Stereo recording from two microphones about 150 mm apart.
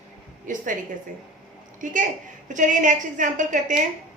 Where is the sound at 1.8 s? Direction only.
60° right (ahead or behind).